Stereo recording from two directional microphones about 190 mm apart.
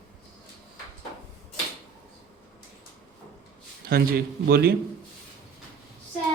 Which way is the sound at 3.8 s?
50° right (ahead or behind).